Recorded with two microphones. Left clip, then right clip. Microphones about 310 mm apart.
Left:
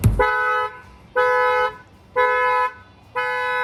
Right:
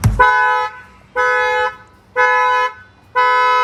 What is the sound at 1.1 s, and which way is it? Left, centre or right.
Toot, right.